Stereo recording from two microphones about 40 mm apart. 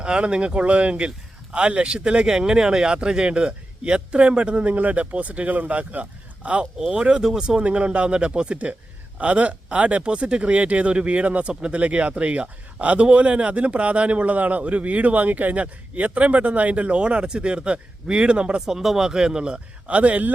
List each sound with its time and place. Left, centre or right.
0.0 s speech: right
6.7 s speech: centre
7.6 s speech: right
18.6 s speech: centre; by 20.3 s right